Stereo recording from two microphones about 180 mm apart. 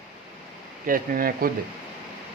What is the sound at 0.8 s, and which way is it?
Speech, 50° right (ahead or behind).